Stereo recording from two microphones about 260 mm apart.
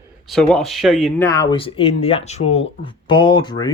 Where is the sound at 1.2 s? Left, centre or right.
Centre.